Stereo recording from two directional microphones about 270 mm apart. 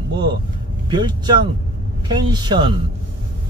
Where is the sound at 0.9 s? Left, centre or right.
Centre.